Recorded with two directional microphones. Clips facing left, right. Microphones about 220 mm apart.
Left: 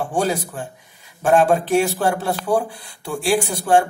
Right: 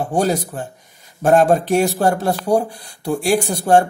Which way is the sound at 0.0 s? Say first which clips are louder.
Right 3 dB; 40° right (ahead or behind).